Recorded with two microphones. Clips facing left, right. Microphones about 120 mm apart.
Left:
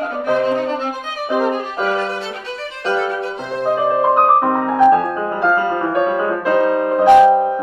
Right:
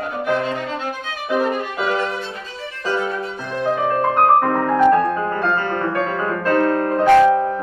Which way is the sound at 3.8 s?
10° left (ahead or behind).